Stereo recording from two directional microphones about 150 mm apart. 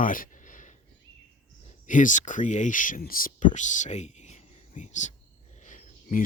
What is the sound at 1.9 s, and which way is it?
Speech, 60° left (ahead or behind).